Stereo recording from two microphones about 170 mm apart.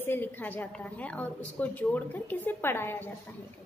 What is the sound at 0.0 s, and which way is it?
A woman's voice, 10° left (ahead or behind).